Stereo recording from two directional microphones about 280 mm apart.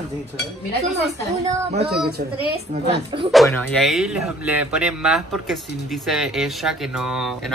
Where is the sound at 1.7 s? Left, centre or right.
Right.